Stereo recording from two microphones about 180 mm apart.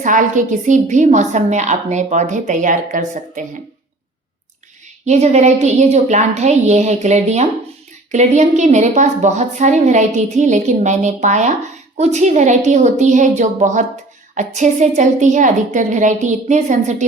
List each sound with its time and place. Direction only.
0.0 s a woman's voice: 45° right (ahead or behind)
5.0 s a woman's voice: 40° right (ahead or behind)